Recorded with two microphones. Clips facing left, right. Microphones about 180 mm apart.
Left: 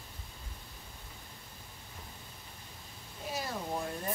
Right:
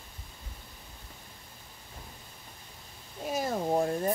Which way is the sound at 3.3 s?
50° right (ahead or behind).